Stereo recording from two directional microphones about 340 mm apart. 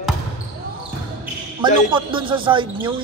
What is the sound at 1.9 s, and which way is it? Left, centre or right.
Speech, centre.